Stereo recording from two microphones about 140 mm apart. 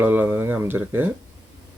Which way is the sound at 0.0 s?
15° right (ahead or behind).